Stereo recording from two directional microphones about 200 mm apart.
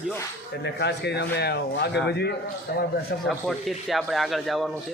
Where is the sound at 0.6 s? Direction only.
55° left (ahead or behind).